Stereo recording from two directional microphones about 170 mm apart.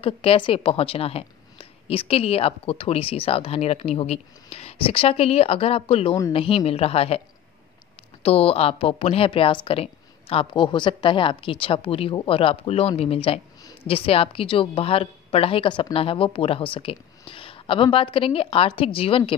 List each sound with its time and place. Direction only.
0.0 s a woman's voice: 35° left (ahead or behind)
8.2 s a woman's voice: 35° left (ahead or behind)